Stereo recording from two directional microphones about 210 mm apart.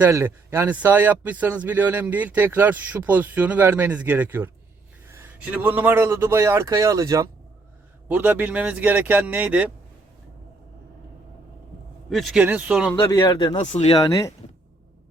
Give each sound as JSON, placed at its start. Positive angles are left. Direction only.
{"t": 0.0, "sound": "speech", "side_deg": -10}
{"t": 12.0, "sound": "a man's voice", "side_deg": 0}
{"t": 13.0, "sound": "speech", "side_deg": 20}
{"t": 13.6, "sound": "speech", "side_deg": 30}
{"t": 14.0, "sound": "speech", "side_deg": 15}